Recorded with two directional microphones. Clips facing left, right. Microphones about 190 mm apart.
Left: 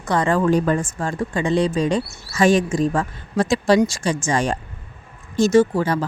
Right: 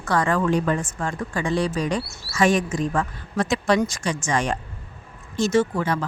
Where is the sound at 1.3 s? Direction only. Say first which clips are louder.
Left 4 dB; 20° left (ahead or behind).